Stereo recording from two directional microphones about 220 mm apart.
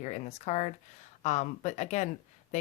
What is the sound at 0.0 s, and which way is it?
Speech, 30° left (ahead or behind).